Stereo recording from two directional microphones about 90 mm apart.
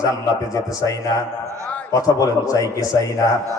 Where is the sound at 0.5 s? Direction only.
40° left (ahead or behind).